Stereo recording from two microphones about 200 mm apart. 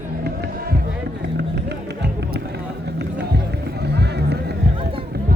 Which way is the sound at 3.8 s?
55° right (ahead or behind).